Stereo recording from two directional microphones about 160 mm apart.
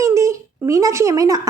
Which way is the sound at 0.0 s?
20° right (ahead or behind).